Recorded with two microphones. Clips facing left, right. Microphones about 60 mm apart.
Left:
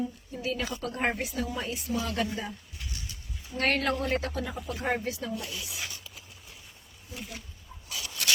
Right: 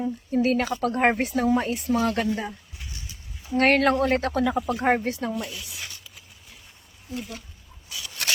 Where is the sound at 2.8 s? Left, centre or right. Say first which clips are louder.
Even; right.